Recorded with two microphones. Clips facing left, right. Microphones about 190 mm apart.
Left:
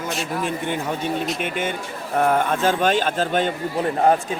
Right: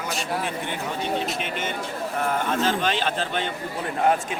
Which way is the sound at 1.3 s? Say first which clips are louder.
Left 3 dB; 50° left (ahead or behind).